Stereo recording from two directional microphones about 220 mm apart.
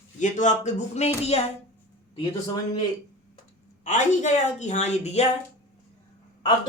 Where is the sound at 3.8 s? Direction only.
30° left (ahead or behind).